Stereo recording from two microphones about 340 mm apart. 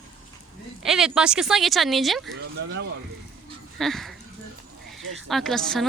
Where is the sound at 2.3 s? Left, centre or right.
Right.